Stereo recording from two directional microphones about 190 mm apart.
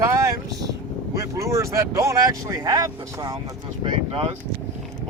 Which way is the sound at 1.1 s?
15° right (ahead or behind).